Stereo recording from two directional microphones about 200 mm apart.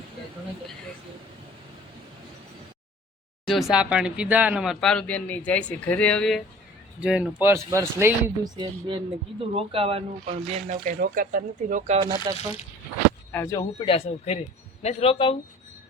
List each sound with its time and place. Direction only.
3.4 s speech: centre (ahead or behind); by 8.6 s 15° right (ahead or behind)
9.4 s speech: 30° right (ahead or behind)
12.3 s speech: 20° right (ahead or behind)
13.3 s speech: 15° left (ahead or behind)
13.7 s speech: 25° left (ahead or behind)